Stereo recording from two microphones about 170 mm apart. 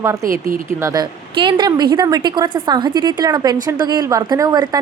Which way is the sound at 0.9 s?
25° right (ahead or behind).